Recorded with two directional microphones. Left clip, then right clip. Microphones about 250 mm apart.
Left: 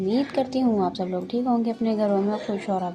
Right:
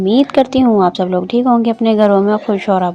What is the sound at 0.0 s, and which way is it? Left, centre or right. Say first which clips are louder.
A woman's voice: right 12 dB; right.